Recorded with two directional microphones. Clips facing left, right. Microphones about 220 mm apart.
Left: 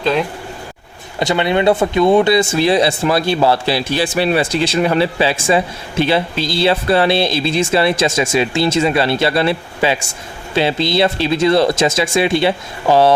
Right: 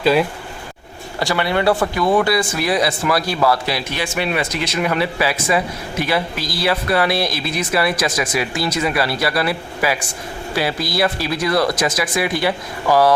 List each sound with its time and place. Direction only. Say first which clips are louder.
0.0 s speech: right 2 dB; 5° right (ahead or behind)
1.2 s speech: left 4 dB; 20° left (ahead or behind)